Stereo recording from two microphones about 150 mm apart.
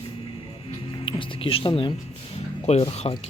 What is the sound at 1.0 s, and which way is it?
Speech, 35° left (ahead or behind).